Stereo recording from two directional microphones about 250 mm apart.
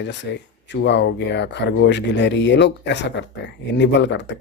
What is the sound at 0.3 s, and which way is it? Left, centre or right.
Speech, left.